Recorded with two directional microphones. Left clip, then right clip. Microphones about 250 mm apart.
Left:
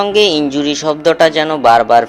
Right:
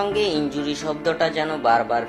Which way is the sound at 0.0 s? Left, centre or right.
Left.